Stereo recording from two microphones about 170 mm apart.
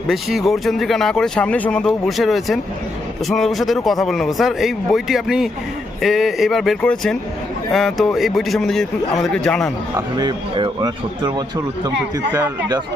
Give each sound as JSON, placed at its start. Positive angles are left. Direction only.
{"t": 0.1, "sound": "speech", "side_deg": 0}
{"t": 10.2, "sound": "speech", "side_deg": -25}